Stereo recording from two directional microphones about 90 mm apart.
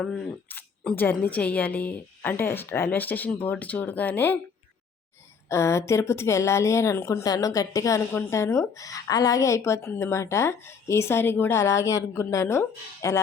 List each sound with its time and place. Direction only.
0.0 s speech: centre (ahead or behind)
0.4 s speech: 20° left (ahead or behind)
5.5 s speech: 30° left (ahead or behind)
7.3 s speech: 45° left (ahead or behind)